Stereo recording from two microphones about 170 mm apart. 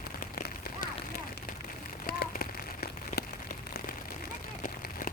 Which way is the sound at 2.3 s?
60° left (ahead or behind).